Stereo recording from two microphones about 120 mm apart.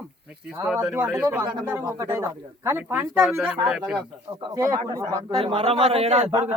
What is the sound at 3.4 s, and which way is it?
Speech, 5° right (ahead or behind).